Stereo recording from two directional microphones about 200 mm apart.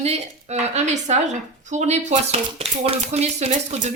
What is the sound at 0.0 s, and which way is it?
Speech, 35° right (ahead or behind).